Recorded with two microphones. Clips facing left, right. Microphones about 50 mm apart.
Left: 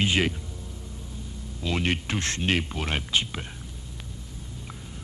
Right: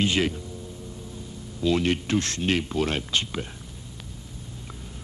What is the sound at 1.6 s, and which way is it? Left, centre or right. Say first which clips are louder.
Speech: right 4 dB; left.